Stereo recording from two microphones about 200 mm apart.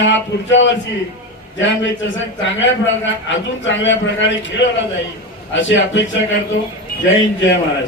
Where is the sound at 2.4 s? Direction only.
65° left (ahead or behind).